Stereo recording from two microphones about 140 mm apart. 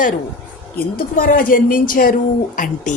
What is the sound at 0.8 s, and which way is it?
Speech, 90° left.